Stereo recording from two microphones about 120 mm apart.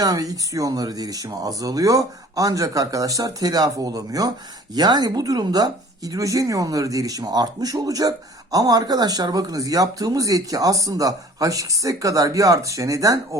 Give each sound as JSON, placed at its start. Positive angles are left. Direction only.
{"t": 0.0, "sound": "speech", "side_deg": -30}